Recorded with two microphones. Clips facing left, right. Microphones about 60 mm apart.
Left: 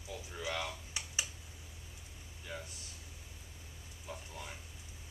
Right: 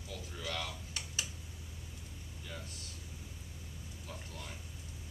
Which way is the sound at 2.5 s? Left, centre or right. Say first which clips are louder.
Left 3 dB; centre.